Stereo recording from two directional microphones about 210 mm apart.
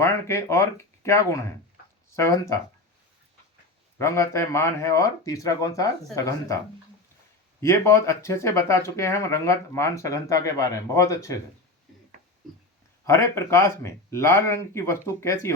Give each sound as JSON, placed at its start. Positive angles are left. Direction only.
{"t": 0.0, "sound": "speech", "side_deg": 10}
{"t": 3.9, "sound": "speech", "side_deg": 15}
{"t": 7.6, "sound": "speech", "side_deg": 15}
{"t": 13.1, "sound": "speech", "side_deg": 15}